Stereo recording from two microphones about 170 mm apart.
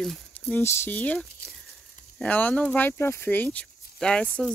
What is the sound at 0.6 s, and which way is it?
Speech, 15° left (ahead or behind).